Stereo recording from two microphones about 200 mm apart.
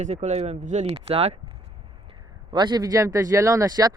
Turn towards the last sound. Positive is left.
turn(degrees=-20)  # may be behind; listen again after turning